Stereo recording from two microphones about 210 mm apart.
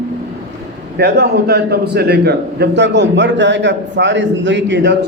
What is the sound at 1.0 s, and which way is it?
A man's voice, 50° right (ahead or behind).